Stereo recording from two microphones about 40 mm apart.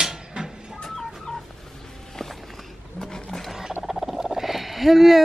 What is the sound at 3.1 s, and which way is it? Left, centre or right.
Wild animals, centre.